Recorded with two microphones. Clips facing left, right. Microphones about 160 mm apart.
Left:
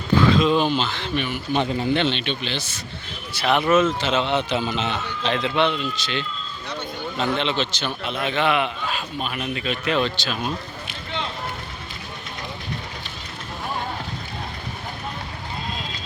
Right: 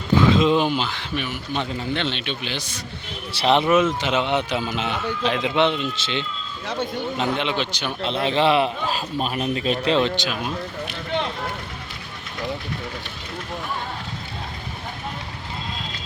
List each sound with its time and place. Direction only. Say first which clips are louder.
0.1 s speech: right 1 dB; 20° right (ahead or behind)
1.5 s a man's voice: left 5 dB; 15° left (ahead or behind)
2.0 s speech: left 3 dB; 5° right (ahead or behind)
3.3 s speech: right 1 dB; 25° right (ahead or behind)
8.0 s a man's voice: right 4 dB; 30° right (ahead or behind)
10.0 s speech: right 2 dB; 20° right (ahead or behind)